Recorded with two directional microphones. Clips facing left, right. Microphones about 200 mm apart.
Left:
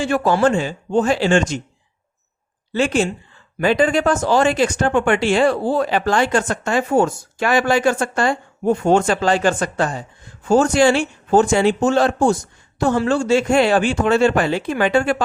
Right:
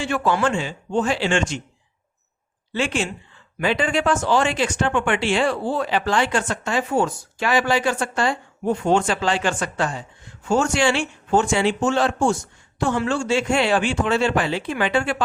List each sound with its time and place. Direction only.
0.0 s speech: 40° left (ahead or behind)
2.7 s speech: 40° left (ahead or behind)